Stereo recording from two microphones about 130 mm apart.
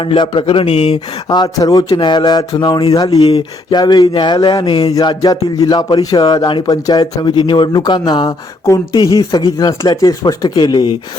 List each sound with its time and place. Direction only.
0.0 s speech: 40° left (ahead or behind)
1.3 s speech: 30° left (ahead or behind)
4.9 s speech: 30° left (ahead or behind)